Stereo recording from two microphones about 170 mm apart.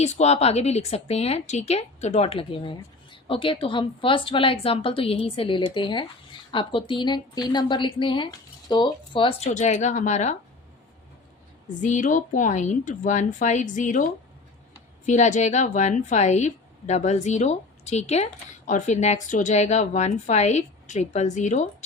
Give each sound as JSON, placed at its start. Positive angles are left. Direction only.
{"t": 0.0, "sound": "a woman's voice", "side_deg": 40}
{"t": 11.8, "sound": "a woman's voice", "side_deg": 50}
{"t": 15.0, "sound": "a woman's voice", "side_deg": 45}